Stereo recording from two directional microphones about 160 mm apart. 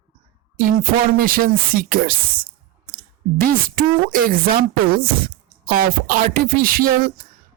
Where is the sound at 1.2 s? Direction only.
65° right (ahead or behind).